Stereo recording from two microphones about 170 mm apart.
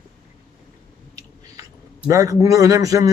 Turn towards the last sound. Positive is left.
turn(degrees=-20)  # may be behind; listen again after turning